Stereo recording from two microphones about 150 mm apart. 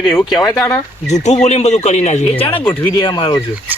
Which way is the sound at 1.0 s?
50° left (ahead or behind).